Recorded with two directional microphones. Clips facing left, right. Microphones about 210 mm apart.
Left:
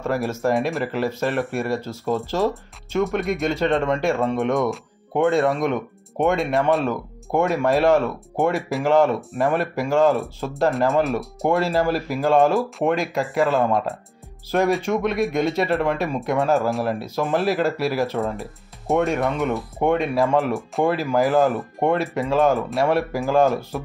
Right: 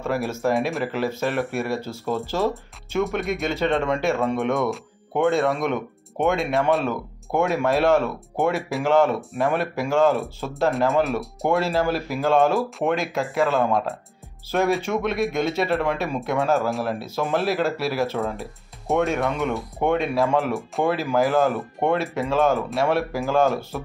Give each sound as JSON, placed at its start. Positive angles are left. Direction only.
{"t": 0.0, "sound": "speech", "side_deg": -5}